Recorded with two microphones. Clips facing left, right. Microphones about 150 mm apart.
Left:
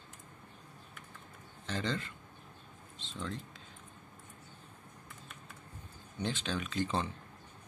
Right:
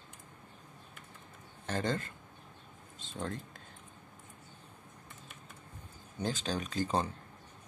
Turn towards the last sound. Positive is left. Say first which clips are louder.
# right 2 dB
turn(degrees=-40)  # may be behind; listen again after turning